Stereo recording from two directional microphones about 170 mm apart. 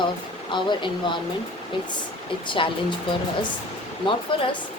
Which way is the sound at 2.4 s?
30° left (ahead or behind).